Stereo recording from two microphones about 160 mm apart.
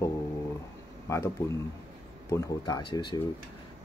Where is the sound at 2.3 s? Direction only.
20° left (ahead or behind).